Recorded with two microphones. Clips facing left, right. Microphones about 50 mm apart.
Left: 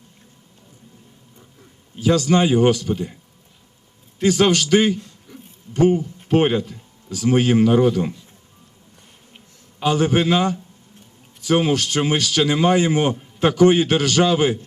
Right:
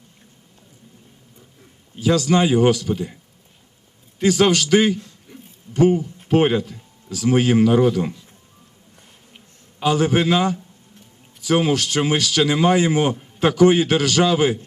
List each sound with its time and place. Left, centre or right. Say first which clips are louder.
2.0 s a man's voice: even; left
4.3 s a man's voice: even; left
5.3 s a sound: left 1 dB; right
5.7 s a man's voice: even; left
9.8 s a man's voice: even; left